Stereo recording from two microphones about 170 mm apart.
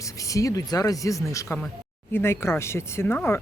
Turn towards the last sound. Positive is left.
turn(degrees=10)  # may be behind; listen again after turning